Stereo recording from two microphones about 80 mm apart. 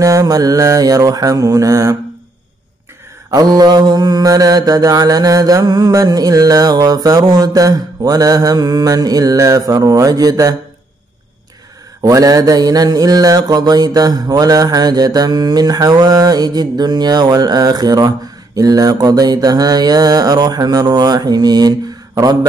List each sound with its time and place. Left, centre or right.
0.0 s mantra: right
3.3 s mantra: right
12.0 s mantra: right